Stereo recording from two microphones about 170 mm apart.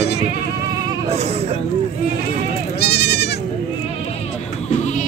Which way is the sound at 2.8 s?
70° left (ahead or behind).